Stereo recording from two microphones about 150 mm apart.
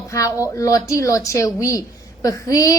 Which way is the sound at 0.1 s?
20° left (ahead or behind).